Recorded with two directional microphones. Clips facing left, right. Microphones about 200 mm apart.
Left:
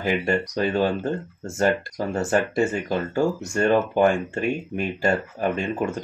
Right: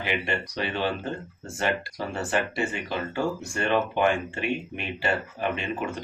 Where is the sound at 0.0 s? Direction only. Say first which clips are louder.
Left 6 dB; 45° left (ahead or behind).